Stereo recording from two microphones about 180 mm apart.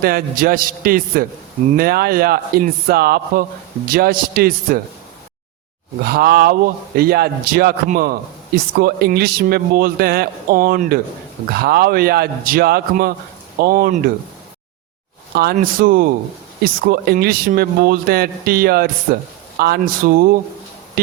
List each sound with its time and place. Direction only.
0.0 s a man's voice: 55° right (ahead or behind)
6.1 s a man's voice: 60° right (ahead or behind)
15.5 s a man's voice: 50° right (ahead or behind)